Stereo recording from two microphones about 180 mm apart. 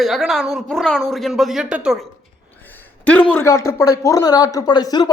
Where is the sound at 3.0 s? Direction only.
10° left (ahead or behind).